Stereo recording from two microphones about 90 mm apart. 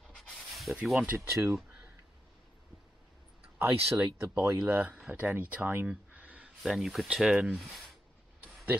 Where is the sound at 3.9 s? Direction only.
20° right (ahead or behind).